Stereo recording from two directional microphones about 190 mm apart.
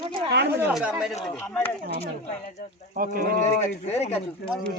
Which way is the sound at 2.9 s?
50° right (ahead or behind).